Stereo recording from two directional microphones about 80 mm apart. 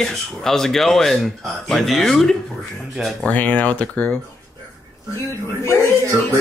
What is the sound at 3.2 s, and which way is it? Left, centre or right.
Speech, centre.